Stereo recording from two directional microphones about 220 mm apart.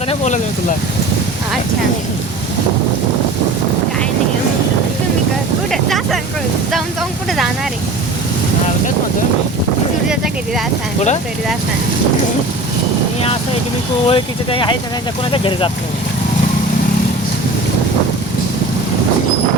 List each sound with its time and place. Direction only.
0.1 s speech: 35° left (ahead or behind)
5.7 s speech: centre (ahead or behind)
7.3 s speech: centre (ahead or behind)
14.1 s speech: 20° left (ahead or behind)